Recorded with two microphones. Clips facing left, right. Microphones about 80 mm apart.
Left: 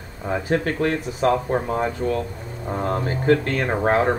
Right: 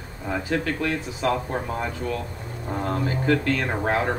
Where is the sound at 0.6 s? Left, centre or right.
Left.